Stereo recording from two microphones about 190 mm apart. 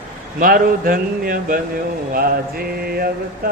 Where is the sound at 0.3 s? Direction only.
50° right (ahead or behind).